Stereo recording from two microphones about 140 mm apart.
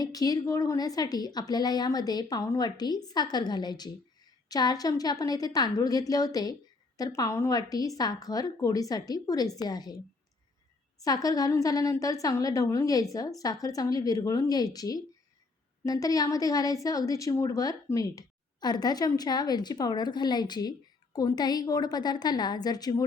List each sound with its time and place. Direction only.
0.0 s speech: 25° left (ahead or behind)
11.0 s speech: 25° left (ahead or behind)